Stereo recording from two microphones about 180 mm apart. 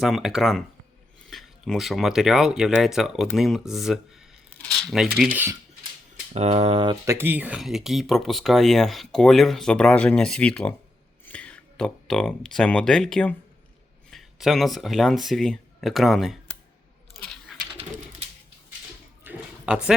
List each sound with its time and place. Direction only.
0.0 s speech: centre (ahead or behind)
6.3 s speech: 35° right (ahead or behind)
7.0 s speech: 15° right (ahead or behind)
19.2 s a sound: 5° right (ahead or behind)